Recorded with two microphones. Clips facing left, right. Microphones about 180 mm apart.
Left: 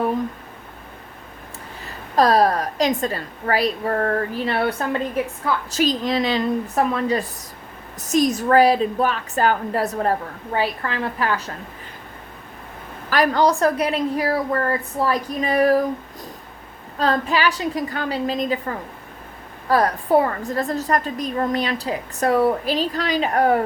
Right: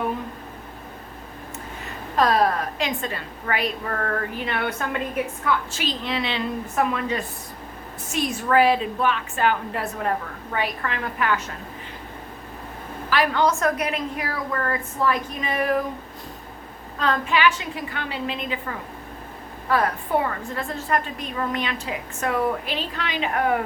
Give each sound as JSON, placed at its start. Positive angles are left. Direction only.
{"t": 2.1, "sound": "a woman's voice", "side_deg": 35}
{"t": 13.1, "sound": "a woman's voice", "side_deg": 40}
{"t": 17.0, "sound": "a woman's voice", "side_deg": 35}
{"t": 19.6, "sound": "a woman's voice", "side_deg": 40}